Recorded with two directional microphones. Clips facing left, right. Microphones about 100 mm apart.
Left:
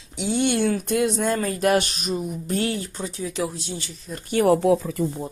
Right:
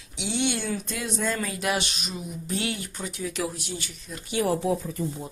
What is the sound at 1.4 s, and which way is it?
Speech, 45° left (ahead or behind).